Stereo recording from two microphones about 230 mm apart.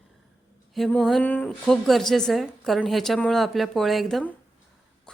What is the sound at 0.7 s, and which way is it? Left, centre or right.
A woman's voice, centre.